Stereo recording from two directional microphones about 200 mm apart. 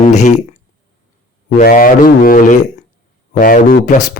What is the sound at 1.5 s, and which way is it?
Speech, 45° left (ahead or behind).